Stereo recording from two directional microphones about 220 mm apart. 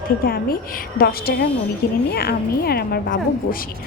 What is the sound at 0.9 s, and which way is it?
A woman's voice, 45° left (ahead or behind).